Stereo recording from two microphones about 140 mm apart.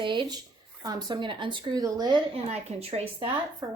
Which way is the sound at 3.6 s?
35° right (ahead or behind).